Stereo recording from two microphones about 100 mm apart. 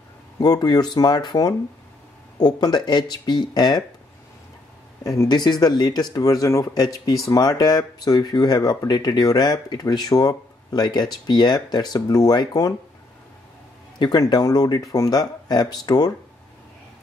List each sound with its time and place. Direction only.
0.4 s speech: 45° left (ahead or behind)
5.0 s speech: 35° left (ahead or behind)
13.9 s speech: 45° left (ahead or behind)